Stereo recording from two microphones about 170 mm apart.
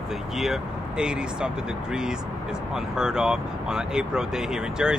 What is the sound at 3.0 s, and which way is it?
Speech, 5° right (ahead or behind).